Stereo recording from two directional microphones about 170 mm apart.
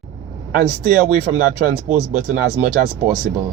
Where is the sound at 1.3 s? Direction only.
45° right (ahead or behind).